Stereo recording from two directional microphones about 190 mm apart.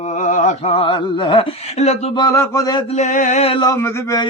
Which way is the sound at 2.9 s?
40° left (ahead or behind).